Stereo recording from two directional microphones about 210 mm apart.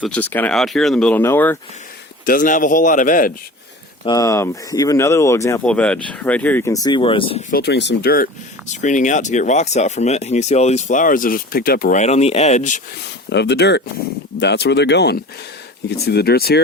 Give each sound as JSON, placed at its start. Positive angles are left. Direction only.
{"t": 0.1, "sound": "speech", "side_deg": 10}
{"t": 2.2, "sound": "speech", "side_deg": 40}
{"t": 4.0, "sound": "speech", "side_deg": 15}
{"t": 7.5, "sound": "speech", "side_deg": 50}
{"t": 13.3, "sound": "speech", "side_deg": 55}